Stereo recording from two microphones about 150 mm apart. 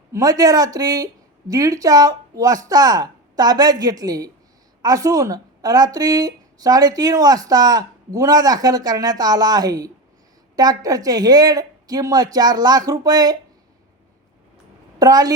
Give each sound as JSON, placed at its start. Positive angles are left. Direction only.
{"t": 0.1, "sound": "speech", "side_deg": -25}
{"t": 14.9, "sound": "a woman's voice", "side_deg": -25}